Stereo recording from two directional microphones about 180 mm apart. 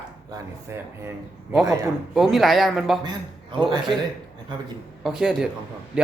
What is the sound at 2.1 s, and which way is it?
Speech, centre (ahead or behind).